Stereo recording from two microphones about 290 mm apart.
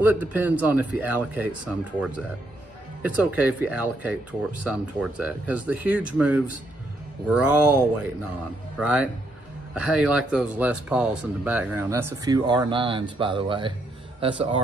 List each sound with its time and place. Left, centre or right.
0.0 s speech: centre
7.6 s a man's voice: centre